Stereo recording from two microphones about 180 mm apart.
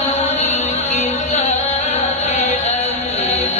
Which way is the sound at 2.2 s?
35° left (ahead or behind).